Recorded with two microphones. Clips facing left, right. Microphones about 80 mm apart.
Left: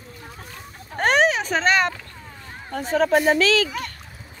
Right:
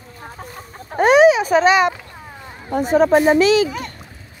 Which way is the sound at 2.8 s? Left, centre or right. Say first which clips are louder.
Right 5 dB; centre.